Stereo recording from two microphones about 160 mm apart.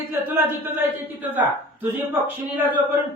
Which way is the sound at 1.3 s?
10° right (ahead or behind).